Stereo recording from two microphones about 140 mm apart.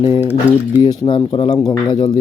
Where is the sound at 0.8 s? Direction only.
35° left (ahead or behind).